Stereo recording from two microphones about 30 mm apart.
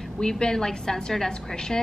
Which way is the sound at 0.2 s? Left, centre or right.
Left.